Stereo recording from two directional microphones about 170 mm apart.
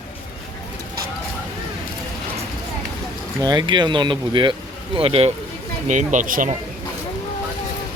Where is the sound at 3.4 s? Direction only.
25° right (ahead or behind).